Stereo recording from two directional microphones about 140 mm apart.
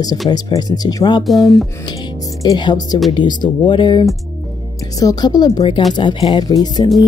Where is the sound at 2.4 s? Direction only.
30° left (ahead or behind).